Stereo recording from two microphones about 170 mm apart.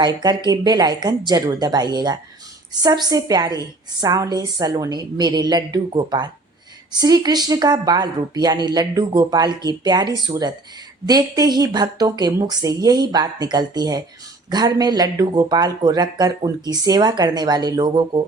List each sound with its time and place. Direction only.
0.0 s speech: 25° right (ahead or behind)